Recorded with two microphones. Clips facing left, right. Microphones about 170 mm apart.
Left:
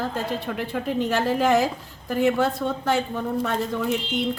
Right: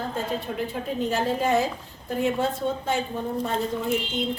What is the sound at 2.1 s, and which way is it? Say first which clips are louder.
Speech: left 3 dB; 75° left (ahead or behind).